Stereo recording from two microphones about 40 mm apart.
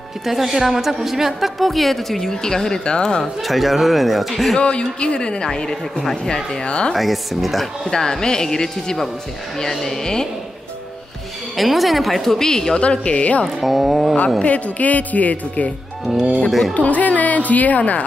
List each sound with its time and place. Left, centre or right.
0.2 s a woman's voice: centre; by 3.3 s left
3.4 s a woman's voice: centre
4.6 s a woman's voice: left
7.0 s a woman's voice: centre
7.8 s speech: centre
11.5 s a woman's voice: centre
12.4 s speech: centre
12.8 s a woman's voice: left
13.6 s a woman's voice: centre
14.4 s speech: left
16.1 s speech: centre
16.7 s speech: left